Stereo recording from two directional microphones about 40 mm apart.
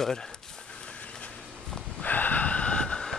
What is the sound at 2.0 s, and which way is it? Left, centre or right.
Gasp, left.